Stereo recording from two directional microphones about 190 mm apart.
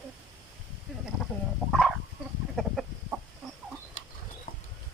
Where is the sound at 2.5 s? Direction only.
Centre (ahead or behind).